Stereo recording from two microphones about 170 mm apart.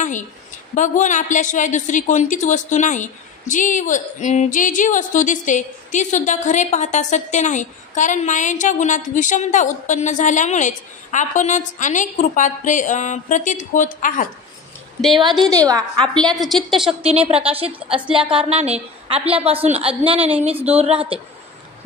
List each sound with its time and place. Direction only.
0.7 s a woman's voice: 50° left (ahead or behind)
15.4 s a woman's voice: 20° right (ahead or behind)
16.0 s a woman's voice: 5° left (ahead or behind)
17.0 s a woman's voice: 35° right (ahead or behind)